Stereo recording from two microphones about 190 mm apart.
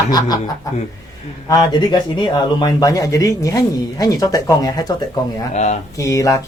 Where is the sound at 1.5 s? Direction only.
20° left (ahead or behind).